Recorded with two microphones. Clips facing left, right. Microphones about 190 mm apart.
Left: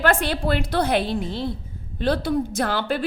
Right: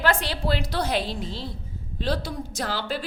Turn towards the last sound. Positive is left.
turn(degrees=55)  # may be behind; listen again after turning